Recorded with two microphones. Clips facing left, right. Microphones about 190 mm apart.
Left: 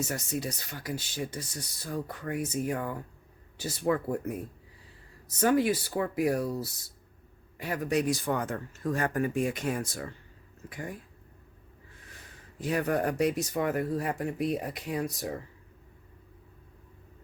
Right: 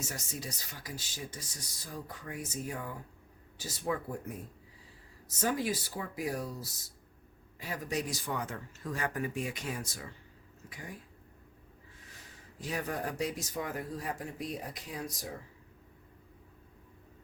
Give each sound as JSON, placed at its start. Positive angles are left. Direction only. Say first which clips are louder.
{"t": 0.1, "sound": "speech", "louder": "left 8 dB", "side_deg": 65}
{"t": 5.4, "sound": "speech", "louder": "left 8 dB", "side_deg": 65}
{"t": 12.5, "sound": "speech", "louder": "left 8 dB", "side_deg": 60}